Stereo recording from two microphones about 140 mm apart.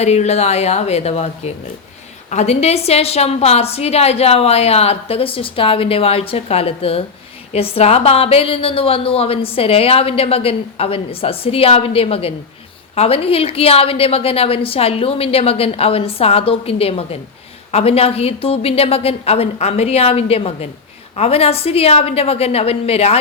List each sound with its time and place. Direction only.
0.0 s a woman's voice: 50° left (ahead or behind)